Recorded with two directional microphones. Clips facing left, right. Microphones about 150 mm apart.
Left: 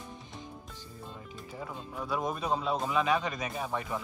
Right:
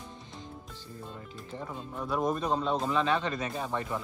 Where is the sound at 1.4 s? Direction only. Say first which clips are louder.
Right 2 dB; 5° left (ahead or behind).